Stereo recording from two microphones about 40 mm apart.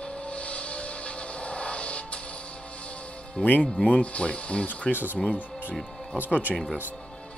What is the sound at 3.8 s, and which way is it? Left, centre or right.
Speech, left.